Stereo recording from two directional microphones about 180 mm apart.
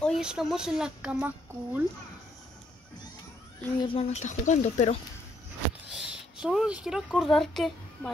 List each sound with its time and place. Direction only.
0.0 s speech: centre (ahead or behind)
3.8 s speech: 30° left (ahead or behind)
4.2 s speech: 40° left (ahead or behind)
5.9 s speech: 5° right (ahead or behind)